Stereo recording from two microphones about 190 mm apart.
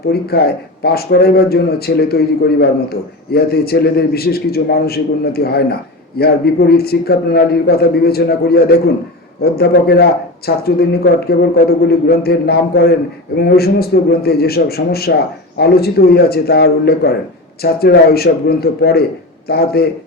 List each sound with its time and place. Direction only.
0.1 s speech: 55° left (ahead or behind)